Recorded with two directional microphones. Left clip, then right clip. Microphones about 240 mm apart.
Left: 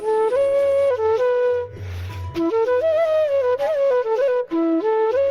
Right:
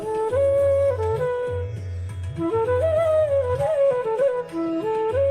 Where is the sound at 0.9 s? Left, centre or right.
Left.